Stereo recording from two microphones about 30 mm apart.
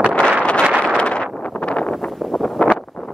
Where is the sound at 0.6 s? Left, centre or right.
Right.